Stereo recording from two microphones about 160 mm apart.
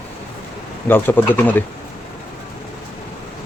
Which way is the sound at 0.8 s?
10° left (ahead or behind).